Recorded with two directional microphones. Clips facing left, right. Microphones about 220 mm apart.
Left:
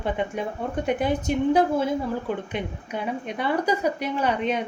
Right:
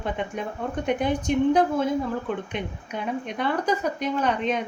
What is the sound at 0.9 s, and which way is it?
Speech, 5° left (ahead or behind).